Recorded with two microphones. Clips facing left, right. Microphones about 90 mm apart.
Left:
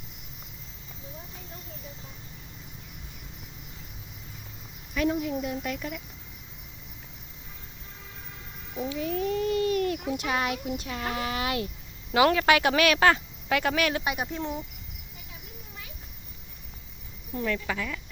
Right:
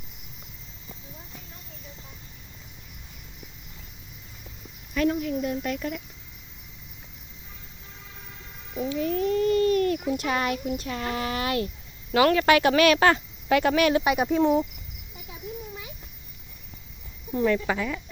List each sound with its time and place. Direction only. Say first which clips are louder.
4.9 s speech: right 2 dB; 10° left (ahead or behind)
8.7 s a child's voice: right 3 dB; 5° left (ahead or behind)
14.4 s speech: right 12 dB; 70° right (ahead or behind)
17.3 s speech: right 6 dB; 25° right (ahead or behind)